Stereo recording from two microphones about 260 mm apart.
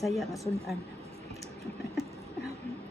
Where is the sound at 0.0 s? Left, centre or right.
Centre.